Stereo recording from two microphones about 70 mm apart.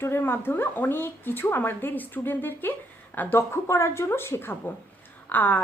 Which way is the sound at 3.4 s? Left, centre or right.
Left.